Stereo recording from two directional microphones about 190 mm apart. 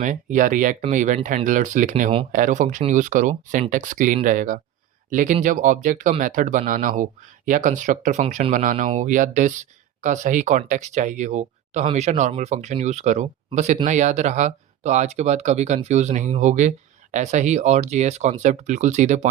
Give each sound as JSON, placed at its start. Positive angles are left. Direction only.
{"t": 0.0, "sound": "speech", "side_deg": -40}